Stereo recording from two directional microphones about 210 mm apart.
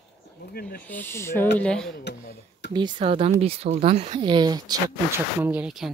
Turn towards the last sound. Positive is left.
turn(degrees=-5)  # may be behind; listen again after turning